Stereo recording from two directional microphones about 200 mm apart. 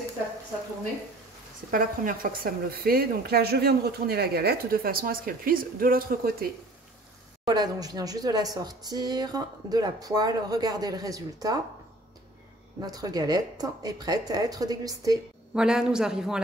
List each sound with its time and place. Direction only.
1.7 s a woman's voice: 45° right (ahead or behind)
7.4 s speech: 20° right (ahead or behind)
12.8 s speech: 20° right (ahead or behind)
15.5 s a man's voice: 5° right (ahead or behind)